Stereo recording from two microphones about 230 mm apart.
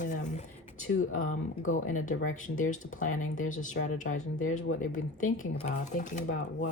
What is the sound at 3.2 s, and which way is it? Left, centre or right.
Speech, left.